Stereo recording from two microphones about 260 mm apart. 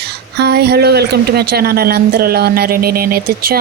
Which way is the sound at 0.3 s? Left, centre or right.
Right.